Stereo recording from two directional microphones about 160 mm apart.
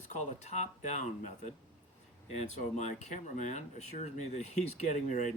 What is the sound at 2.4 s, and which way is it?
Speech, 45° left (ahead or behind).